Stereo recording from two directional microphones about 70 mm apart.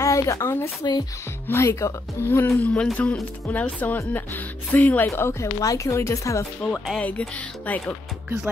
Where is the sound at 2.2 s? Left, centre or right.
Left.